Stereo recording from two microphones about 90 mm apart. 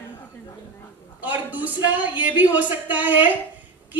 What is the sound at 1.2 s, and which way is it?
A woman's voice, 20° right (ahead or behind).